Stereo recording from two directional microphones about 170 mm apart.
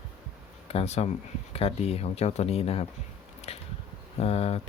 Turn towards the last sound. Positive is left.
turn(degrees=35)  # may be behind; listen again after turning